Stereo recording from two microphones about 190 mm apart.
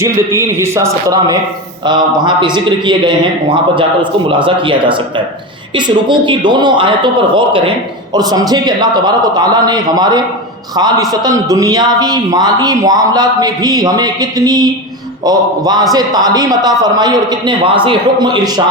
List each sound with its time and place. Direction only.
0.3 s a man's voice: 15° right (ahead or behind)